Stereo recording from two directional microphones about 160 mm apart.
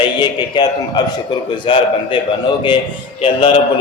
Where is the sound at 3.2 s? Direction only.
30° left (ahead or behind).